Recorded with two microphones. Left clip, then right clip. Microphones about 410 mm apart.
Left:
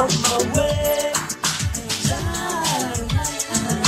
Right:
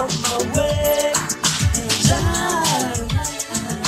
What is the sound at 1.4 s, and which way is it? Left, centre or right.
Music, right.